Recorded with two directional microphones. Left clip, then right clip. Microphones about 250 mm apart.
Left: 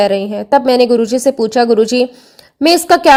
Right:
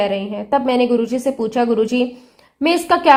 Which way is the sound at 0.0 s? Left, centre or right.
Left.